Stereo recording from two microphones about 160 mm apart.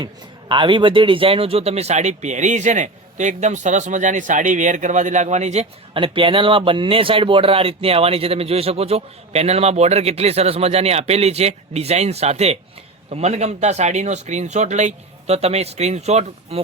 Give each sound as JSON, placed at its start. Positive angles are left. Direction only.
{"t": 0.0, "sound": "a man's voice", "side_deg": -30}